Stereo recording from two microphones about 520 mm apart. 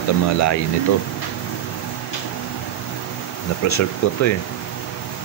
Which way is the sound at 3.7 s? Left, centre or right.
Left.